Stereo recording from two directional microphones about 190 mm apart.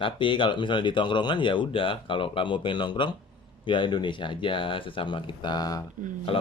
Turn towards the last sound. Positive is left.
turn(degrees=30)  # may be behind; listen again after turning